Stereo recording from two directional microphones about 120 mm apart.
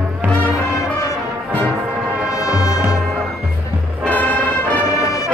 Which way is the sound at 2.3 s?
30° left (ahead or behind).